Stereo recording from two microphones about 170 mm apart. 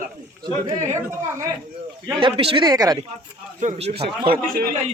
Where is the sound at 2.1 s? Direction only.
30° right (ahead or behind).